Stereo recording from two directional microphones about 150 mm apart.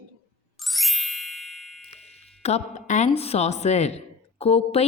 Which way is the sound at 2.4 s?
50° left (ahead or behind).